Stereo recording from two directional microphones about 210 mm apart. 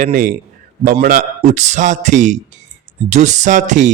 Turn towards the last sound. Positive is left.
turn(degrees=-35)  # may be behind; listen again after turning